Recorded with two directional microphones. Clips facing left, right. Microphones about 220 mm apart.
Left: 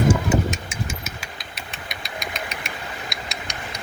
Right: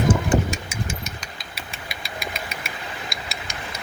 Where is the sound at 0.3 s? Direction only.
Centre (ahead or behind).